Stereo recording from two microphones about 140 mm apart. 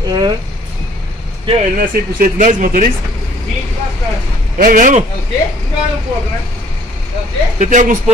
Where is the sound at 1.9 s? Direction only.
85° right; by 2.8 s 65° right (ahead or behind).